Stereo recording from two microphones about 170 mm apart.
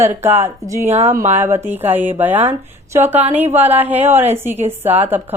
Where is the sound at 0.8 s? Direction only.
40° right (ahead or behind).